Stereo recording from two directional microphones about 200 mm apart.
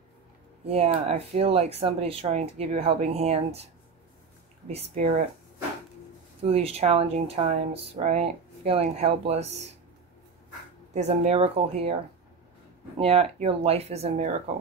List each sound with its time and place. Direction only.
0.7 s speech: 30° right (ahead or behind)
4.6 s speech: 35° right (ahead or behind)
6.4 s speech: 30° right (ahead or behind)
10.9 s speech: 35° right (ahead or behind)
13.0 s speech: 30° right (ahead or behind)